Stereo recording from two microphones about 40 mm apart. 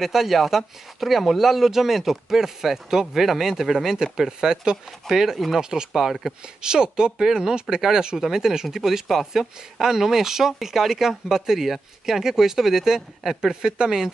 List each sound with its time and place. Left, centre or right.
0.0 s speech: centre